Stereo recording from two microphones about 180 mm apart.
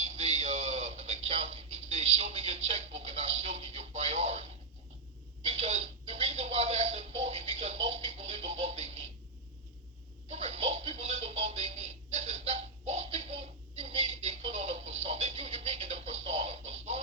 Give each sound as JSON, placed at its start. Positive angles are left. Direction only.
{"t": 0.0, "sound": "a sound", "side_deg": -35}
{"t": 5.4, "sound": "television", "side_deg": -35}
{"t": 10.2, "sound": "music", "side_deg": -35}